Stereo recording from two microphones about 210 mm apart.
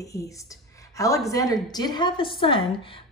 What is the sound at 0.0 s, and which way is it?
A woman's voice, 15° left (ahead or behind).